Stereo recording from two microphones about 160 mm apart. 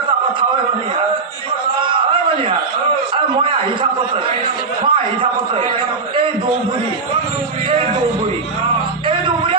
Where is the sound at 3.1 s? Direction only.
35° right (ahead or behind).